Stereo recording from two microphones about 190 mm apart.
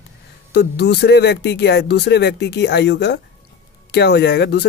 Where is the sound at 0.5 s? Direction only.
60° left (ahead or behind).